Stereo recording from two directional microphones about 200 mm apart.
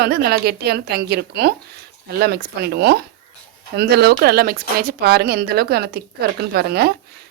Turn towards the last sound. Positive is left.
turn(degrees=-55)  # may be behind; listen again after turning